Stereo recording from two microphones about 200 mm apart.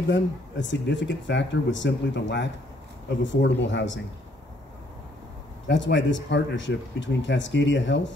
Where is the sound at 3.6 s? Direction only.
65° left (ahead or behind).